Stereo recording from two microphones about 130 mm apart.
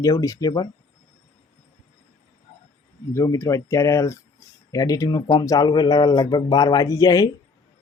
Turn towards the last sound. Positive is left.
turn(degrees=25)  # may be behind; listen again after turning